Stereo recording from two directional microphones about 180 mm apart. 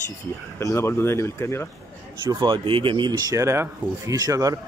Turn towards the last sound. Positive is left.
turn(degrees=-20)  # may be behind; listen again after turning